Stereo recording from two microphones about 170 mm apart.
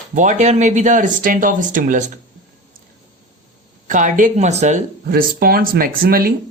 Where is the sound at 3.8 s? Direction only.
50° right (ahead or behind).